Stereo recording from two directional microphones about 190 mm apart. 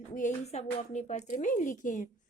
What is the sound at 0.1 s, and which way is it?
A woman's voice, 40° left (ahead or behind).